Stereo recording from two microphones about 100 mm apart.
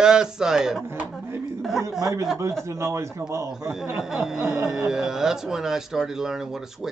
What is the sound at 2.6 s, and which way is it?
Speech, 30° right (ahead or behind).